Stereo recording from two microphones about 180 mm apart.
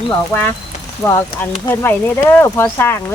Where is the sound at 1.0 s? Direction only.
5° left (ahead or behind).